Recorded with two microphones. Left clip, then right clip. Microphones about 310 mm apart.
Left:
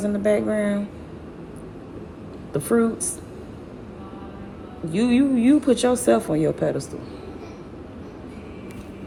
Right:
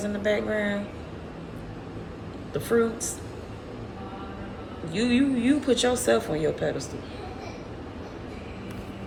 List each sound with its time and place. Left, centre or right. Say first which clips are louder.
0.0 s speech: left 5 dB; centre
2.5 s a woman's voice: left 4 dB; left
4.9 s speech: left 4 dB; centre